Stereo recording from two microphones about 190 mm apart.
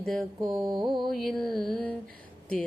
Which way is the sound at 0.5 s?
25° right (ahead or behind).